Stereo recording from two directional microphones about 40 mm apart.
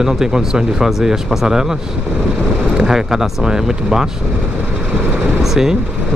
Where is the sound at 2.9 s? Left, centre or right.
Centre.